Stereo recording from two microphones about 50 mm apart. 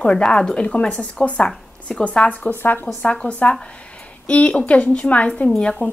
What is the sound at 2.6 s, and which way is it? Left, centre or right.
Speech, left.